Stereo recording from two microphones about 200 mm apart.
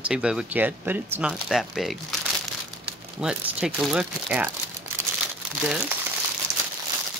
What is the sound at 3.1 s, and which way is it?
Speech, 5° right (ahead or behind).